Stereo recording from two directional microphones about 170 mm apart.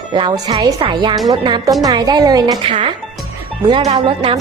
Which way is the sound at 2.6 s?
35° right (ahead or behind).